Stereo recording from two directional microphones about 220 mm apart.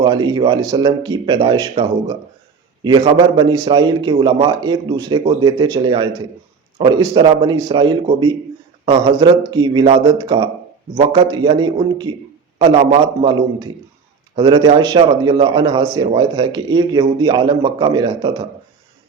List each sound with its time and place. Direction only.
0.0 s a man's voice: 20° right (ahead or behind)